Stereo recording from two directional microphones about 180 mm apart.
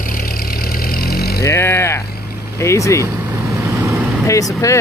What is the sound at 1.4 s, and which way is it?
Speech, 15° left (ahead or behind).